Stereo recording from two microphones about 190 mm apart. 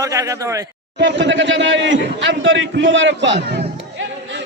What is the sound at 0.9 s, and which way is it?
A man's voice, 70° right (ahead or behind).